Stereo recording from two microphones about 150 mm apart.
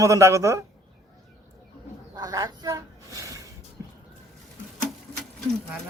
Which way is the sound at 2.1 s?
25° right (ahead or behind).